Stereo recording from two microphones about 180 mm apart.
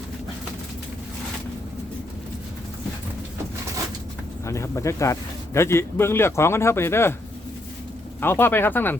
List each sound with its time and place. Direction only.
4.4 s speech: 15° left (ahead or behind)
8.2 s speech: 10° left (ahead or behind)